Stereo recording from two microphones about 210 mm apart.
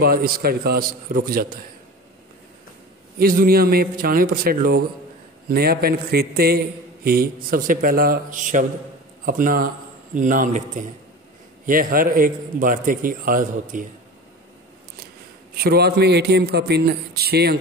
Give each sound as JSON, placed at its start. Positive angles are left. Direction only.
{"t": 0.0, "sound": "a man's voice", "side_deg": -45}
{"t": 3.2, "sound": "a man's voice", "side_deg": -45}
{"t": 15.5, "sound": "a man's voice", "side_deg": -45}